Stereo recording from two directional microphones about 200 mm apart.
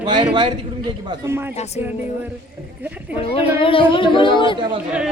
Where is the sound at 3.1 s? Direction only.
25° left (ahead or behind).